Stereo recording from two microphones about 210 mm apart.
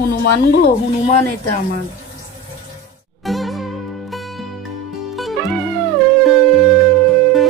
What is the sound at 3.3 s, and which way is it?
Music, centre (ahead or behind).